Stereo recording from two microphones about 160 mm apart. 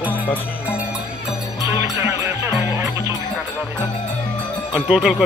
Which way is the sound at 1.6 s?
20° right (ahead or behind).